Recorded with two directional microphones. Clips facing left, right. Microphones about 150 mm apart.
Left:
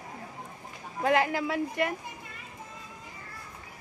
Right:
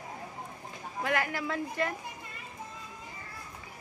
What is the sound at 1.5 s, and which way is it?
Speech, 10° left (ahead or behind).